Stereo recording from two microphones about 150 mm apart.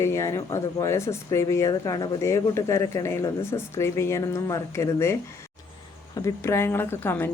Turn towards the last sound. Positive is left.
turn(degrees=15)  # may be behind; listen again after turning